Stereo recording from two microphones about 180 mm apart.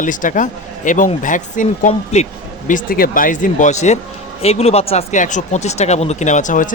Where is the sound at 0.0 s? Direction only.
45° left (ahead or behind).